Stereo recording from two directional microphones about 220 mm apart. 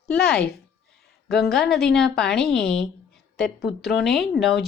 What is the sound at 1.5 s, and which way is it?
A woman's voice, centre (ahead or behind).